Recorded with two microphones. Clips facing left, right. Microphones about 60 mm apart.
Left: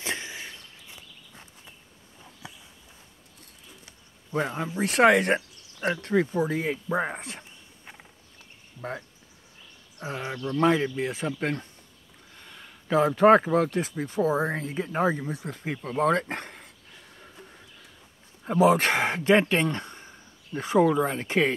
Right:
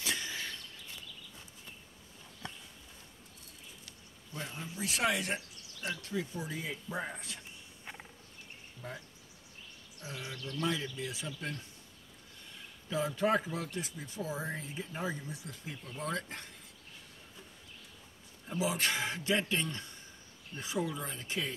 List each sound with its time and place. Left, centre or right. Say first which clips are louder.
0.0 s a sound: left 4 dB; left
2.4 s a sound: even; centre
4.3 s a man's voice: left 15 dB; left
4.6 s speech: left 13 dB; left
7.8 s insect: right 1 dB; centre
10.0 s a man's voice: left 11 dB; left
10.3 s speech: left 12 dB; left
10.6 s a man's voice: left 12 dB; left
18.4 s a man's voice: left 13 dB; left